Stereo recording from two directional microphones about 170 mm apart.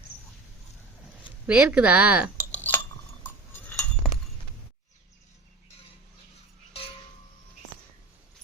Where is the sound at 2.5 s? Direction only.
10° left (ahead or behind).